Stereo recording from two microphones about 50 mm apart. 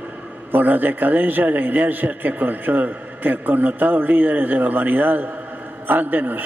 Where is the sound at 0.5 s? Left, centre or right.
Right.